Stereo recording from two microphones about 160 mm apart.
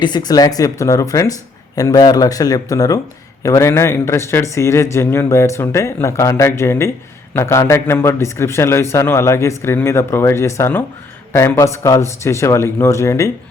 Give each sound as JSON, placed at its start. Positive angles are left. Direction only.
{"t": 0.0, "sound": "speech", "side_deg": 25}